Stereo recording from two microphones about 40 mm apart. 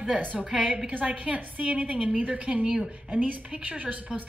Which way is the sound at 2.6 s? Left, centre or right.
Centre.